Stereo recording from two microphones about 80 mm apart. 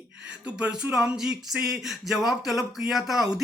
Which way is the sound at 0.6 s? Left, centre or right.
Centre.